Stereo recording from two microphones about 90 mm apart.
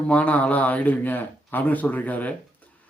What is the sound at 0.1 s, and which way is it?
A man's voice, 15° left (ahead or behind).